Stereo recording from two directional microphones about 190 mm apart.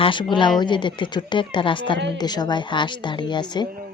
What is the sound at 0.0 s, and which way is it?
A woman's voice, 25° left (ahead or behind).